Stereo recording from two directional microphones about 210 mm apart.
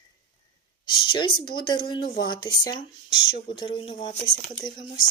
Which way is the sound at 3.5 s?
20° left (ahead or behind).